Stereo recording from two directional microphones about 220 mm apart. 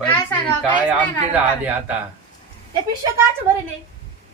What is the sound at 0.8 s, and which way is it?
Speech, 5° right (ahead or behind).